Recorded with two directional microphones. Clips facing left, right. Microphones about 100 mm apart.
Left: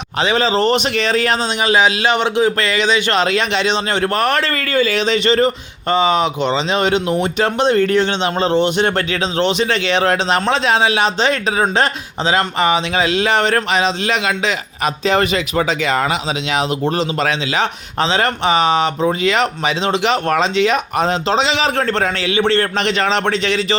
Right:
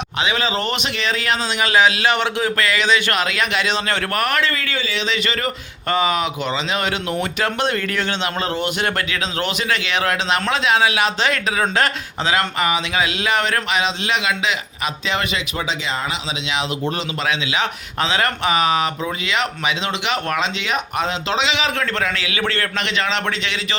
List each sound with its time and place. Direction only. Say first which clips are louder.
0.2 s a man's voice: left 6 dB; 35° left (ahead or behind)
1.6 s speech: left 1 dB; 20° left (ahead or behind)
4.5 s speech: left 8 dB; 50° left (ahead or behind)
16.8 s a man's voice: left 5 dB; 40° left (ahead or behind)